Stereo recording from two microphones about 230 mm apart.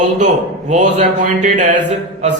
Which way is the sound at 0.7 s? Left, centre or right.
Right.